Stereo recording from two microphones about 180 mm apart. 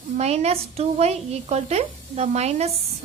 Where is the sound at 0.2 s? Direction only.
35° right (ahead or behind).